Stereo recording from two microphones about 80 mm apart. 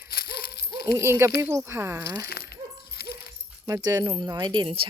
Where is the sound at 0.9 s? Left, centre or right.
Right.